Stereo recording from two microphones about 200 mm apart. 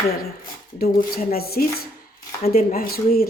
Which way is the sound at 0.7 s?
45° left (ahead or behind).